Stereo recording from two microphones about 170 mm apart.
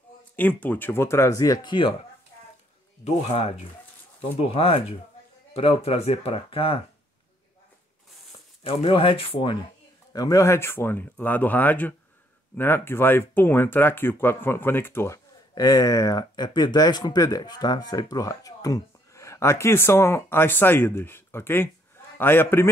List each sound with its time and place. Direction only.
0.4 s speech: 10° left (ahead or behind); by 6.8 s 35° left (ahead or behind)
8.6 s speech: 30° left (ahead or behind)
10.1 s speech: 20° left (ahead or behind)